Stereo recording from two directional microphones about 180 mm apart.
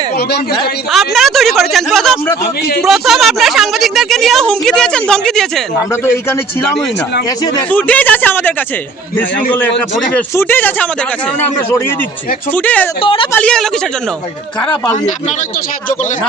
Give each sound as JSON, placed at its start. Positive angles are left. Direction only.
{"t": 0.2, "sound": "a man's voice", "side_deg": 65}
{"t": 0.9, "sound": "a woman's voice", "side_deg": 0}
{"t": 7.7, "sound": "a man's voice", "side_deg": 10}
{"t": 10.2, "sound": "a man's voice", "side_deg": 10}
{"t": 13.0, "sound": "a woman's voice", "side_deg": 30}
{"t": 13.3, "sound": "a woman's voice", "side_deg": 5}